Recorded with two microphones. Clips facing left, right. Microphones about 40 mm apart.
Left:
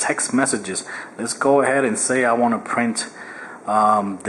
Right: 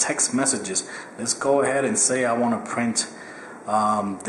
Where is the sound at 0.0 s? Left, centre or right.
Centre.